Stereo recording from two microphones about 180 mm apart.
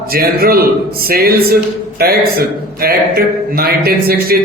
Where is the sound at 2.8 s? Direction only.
55° right (ahead or behind).